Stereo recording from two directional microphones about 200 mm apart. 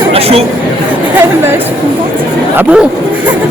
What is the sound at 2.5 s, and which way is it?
Speech, 5° right (ahead or behind).